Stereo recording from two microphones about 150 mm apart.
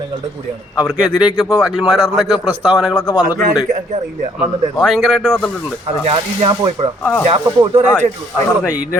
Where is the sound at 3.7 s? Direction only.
55° right (ahead or behind).